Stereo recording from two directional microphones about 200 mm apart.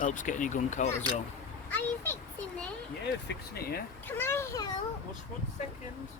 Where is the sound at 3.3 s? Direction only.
50° left (ahead or behind).